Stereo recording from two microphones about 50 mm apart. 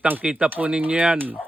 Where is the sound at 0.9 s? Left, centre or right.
Right.